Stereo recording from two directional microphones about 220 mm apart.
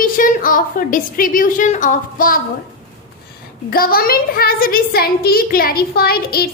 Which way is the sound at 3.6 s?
40° left (ahead or behind).